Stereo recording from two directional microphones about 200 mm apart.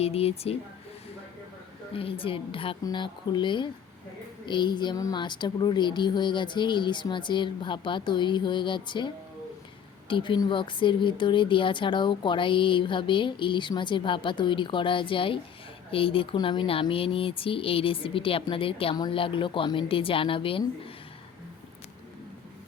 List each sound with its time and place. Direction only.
0.0 s speech: 30° left (ahead or behind)
1.9 s speech: 25° left (ahead or behind)